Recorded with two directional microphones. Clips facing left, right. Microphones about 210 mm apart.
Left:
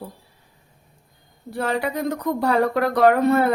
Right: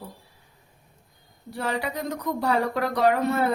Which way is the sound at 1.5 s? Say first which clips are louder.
Left 5 dB; 55° left (ahead or behind).